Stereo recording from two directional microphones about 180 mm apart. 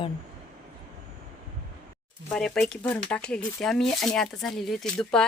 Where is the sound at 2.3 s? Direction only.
5° left (ahead or behind).